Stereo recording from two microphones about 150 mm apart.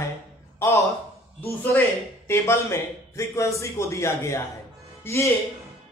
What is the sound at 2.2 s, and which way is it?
A man's voice, 15° left (ahead or behind).